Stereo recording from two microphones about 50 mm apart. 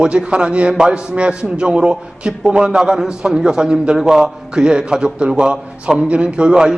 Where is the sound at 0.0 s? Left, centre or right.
Right.